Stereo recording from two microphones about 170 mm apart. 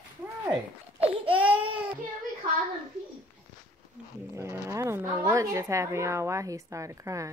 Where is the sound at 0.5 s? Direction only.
35° right (ahead or behind).